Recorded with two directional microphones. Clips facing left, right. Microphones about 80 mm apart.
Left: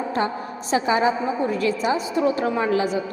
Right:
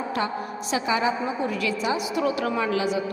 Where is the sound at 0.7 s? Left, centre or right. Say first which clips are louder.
Left 4 dB; left.